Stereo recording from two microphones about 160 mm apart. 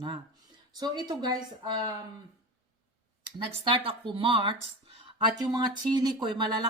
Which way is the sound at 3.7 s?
35° right (ahead or behind).